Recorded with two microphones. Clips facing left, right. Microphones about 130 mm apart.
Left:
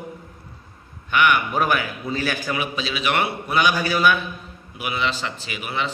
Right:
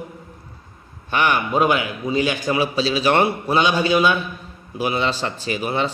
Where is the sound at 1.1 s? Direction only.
35° right (ahead or behind).